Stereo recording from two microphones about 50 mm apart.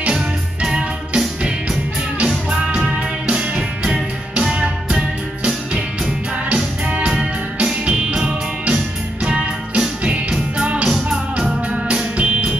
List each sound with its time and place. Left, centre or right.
0.1 s music: centre
6.5 s music: right